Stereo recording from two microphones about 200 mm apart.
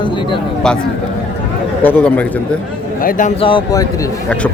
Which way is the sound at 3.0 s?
45° left (ahead or behind).